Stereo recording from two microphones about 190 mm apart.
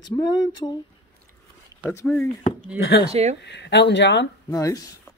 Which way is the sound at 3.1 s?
35° right (ahead or behind).